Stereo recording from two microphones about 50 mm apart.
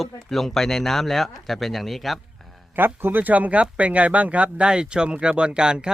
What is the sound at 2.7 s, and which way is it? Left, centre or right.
Speech, right.